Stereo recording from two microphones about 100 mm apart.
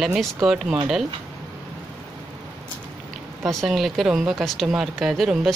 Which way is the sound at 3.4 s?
Centre (ahead or behind).